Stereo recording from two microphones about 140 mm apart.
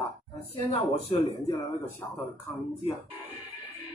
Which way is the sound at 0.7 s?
45° left (ahead or behind).